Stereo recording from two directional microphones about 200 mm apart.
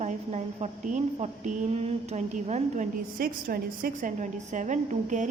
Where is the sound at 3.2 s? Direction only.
45° right (ahead or behind).